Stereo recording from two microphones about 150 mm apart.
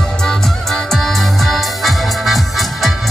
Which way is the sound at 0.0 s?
5° left (ahead or behind).